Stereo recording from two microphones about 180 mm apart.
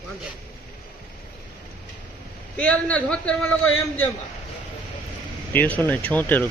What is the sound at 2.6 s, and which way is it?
Speech, 5° left (ahead or behind).